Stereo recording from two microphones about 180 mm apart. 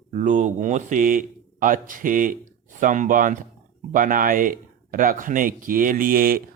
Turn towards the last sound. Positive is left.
turn(degrees=-55)  # may be behind; listen again after turning